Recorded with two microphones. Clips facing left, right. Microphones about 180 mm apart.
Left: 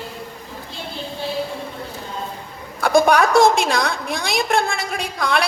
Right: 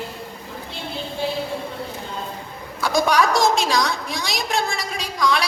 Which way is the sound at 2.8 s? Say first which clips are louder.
Left 4 dB; 55° left (ahead or behind).